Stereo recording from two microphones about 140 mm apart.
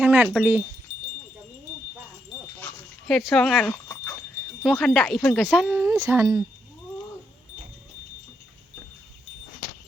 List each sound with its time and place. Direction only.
0.0 s a sound: 15° right (ahead or behind)
0.3 s speech: 15° right (ahead or behind)
3.1 s speech: centre (ahead or behind)
5.5 s speech: 15° right (ahead or behind)